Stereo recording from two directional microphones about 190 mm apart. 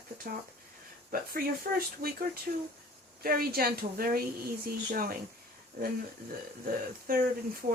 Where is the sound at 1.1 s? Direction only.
50° right (ahead or behind).